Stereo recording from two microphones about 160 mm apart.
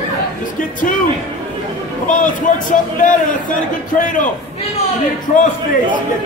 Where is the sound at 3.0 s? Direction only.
55° left (ahead or behind).